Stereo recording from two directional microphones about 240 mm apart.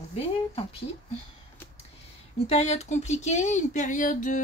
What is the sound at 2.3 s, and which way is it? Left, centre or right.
Speech, left.